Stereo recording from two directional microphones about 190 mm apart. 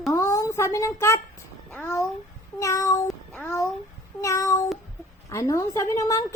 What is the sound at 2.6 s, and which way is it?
Meow, 15° left (ahead or behind).